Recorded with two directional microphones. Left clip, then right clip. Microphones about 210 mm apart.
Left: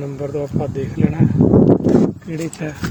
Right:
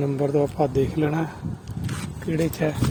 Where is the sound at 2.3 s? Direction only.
15° right (ahead or behind).